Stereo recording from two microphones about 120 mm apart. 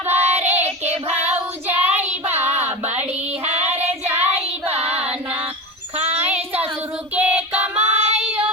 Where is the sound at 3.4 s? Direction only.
65° right (ahead or behind).